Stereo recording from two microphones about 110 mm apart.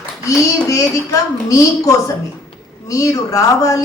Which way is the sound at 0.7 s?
30° left (ahead or behind).